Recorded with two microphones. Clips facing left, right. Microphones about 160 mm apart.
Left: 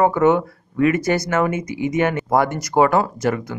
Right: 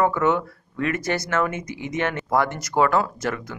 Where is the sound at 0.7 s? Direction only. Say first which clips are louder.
Left 7 dB; 15° left (ahead or behind).